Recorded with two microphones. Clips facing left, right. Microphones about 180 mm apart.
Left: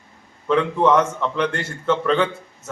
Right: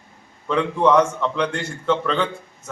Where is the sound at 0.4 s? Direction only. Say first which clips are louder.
Left 1 dB; 5° left (ahead or behind).